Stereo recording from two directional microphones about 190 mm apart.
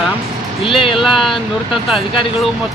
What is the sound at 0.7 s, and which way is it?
Speech, 30° left (ahead or behind).